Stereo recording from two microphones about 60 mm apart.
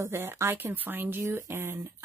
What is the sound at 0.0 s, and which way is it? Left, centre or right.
Speech, right.